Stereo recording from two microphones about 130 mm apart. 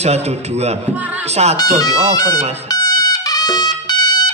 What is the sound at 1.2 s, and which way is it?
Speech, 55° right (ahead or behind).